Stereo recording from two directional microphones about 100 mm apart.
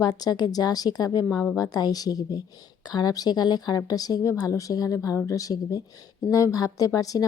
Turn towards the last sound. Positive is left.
turn(degrees=35)  # may be behind; listen again after turning